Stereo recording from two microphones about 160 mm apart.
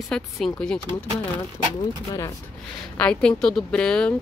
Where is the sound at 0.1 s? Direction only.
5° left (ahead or behind).